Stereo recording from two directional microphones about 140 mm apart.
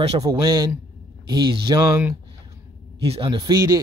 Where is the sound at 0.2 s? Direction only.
25° right (ahead or behind).